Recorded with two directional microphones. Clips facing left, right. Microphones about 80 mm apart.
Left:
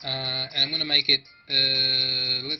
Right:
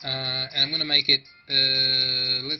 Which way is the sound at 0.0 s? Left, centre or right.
Right.